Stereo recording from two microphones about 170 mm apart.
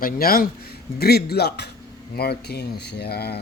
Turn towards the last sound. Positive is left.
turn(degrees=70)  # may be behind; listen again after turning